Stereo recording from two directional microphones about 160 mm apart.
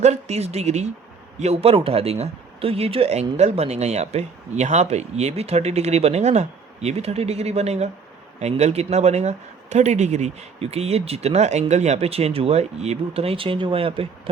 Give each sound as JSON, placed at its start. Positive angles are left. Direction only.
{"t": 0.0, "sound": "speech", "side_deg": -45}